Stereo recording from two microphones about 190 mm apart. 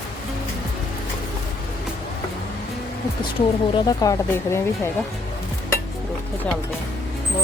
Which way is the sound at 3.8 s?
20° left (ahead or behind).